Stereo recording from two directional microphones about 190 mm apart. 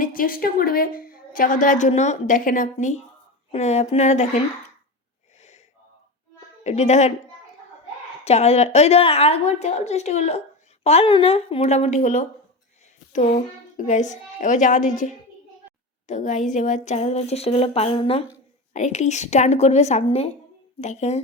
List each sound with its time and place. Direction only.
0.0 s a woman's voice: 50° left (ahead or behind)
6.7 s speech: 35° left (ahead or behind)
8.2 s speech: 35° left (ahead or behind)